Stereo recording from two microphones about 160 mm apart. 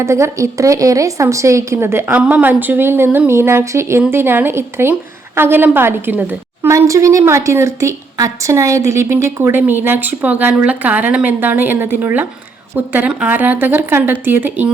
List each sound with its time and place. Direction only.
0.0 s a woman's voice: 15° right (ahead or behind)